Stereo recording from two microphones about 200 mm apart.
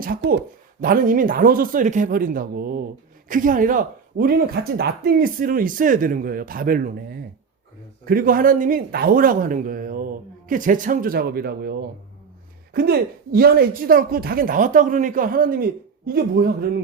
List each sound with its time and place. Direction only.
0.0 s speech: 45° right (ahead or behind)